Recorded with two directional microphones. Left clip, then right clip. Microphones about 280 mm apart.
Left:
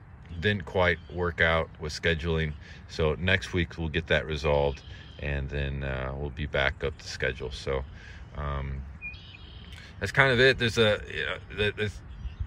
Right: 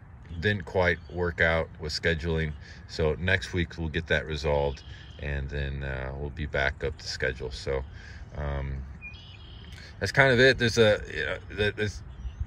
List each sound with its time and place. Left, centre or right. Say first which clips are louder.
0.4 s speech: even; centre
9.9 s speech: right 1 dB; centre